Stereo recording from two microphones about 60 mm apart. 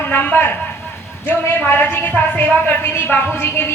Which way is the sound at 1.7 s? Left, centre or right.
Left.